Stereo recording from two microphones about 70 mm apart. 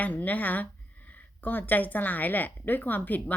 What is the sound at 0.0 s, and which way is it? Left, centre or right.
A woman's voice, left.